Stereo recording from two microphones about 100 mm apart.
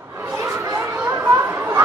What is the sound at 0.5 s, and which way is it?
Chatter, 30° right (ahead or behind).